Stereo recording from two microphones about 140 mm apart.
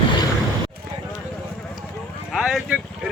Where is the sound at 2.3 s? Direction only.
5° right (ahead or behind).